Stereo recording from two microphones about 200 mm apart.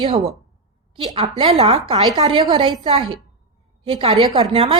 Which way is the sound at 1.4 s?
25° right (ahead or behind).